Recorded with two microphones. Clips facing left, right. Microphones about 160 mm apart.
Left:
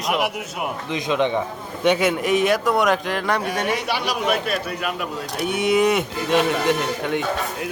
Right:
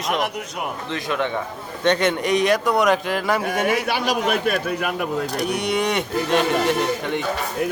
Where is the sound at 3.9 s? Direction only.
50° right (ahead or behind).